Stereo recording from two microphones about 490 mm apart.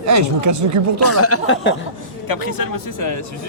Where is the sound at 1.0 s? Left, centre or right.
Left.